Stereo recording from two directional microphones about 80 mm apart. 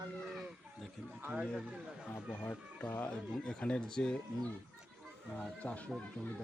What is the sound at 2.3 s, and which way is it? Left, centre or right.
Speech, left.